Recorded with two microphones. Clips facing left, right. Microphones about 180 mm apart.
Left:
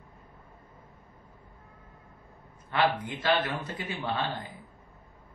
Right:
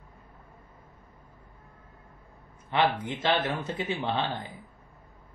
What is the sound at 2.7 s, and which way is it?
A man's voice, 25° right (ahead or behind).